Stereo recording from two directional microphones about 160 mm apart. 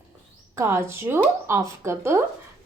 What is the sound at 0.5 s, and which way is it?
A woman's voice, 15° right (ahead or behind).